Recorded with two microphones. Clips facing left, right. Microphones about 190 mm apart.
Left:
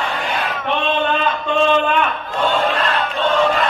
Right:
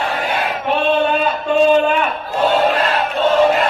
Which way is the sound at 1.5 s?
40° right (ahead or behind).